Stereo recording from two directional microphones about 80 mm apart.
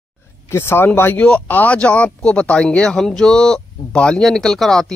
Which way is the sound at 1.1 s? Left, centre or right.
Centre.